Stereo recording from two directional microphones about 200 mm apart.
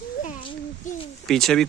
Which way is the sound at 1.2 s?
Centre (ahead or behind).